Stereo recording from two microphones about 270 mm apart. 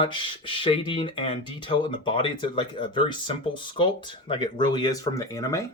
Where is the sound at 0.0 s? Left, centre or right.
Centre.